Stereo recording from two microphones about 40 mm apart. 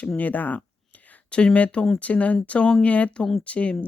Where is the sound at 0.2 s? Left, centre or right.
Left.